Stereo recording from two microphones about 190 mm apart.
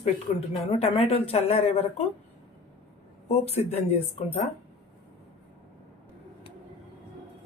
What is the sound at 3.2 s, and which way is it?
Speech, 35° left (ahead or behind).